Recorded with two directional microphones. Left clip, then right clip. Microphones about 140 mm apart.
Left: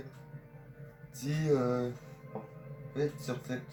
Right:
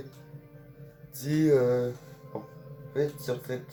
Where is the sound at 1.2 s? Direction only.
90° right.